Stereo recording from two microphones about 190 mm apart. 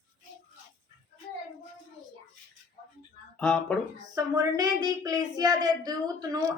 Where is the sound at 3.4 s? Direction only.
5° left (ahead or behind).